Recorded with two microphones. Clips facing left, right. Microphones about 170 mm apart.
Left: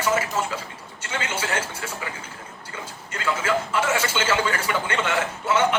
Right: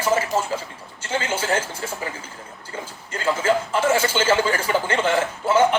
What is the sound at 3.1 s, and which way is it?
A man's voice, 30° right (ahead or behind).